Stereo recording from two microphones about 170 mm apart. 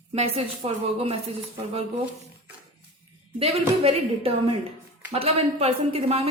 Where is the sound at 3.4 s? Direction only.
35° right (ahead or behind).